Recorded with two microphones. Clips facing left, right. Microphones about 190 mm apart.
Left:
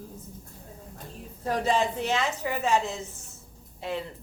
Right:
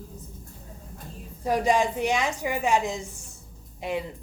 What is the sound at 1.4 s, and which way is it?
A woman's voice, 15° right (ahead or behind).